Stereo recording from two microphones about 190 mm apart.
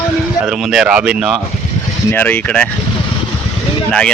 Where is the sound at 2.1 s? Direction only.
10° left (ahead or behind).